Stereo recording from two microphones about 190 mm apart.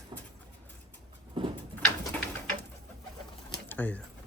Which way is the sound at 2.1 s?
5° left (ahead or behind).